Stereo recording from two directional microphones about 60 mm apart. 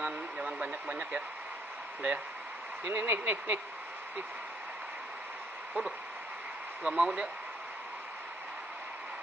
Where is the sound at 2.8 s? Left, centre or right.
Right.